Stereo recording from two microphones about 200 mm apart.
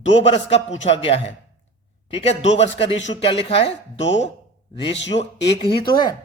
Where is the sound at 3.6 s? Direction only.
65° left (ahead or behind).